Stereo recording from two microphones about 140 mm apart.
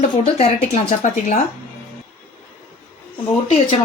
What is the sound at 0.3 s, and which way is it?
A woman's voice, 55° left (ahead or behind).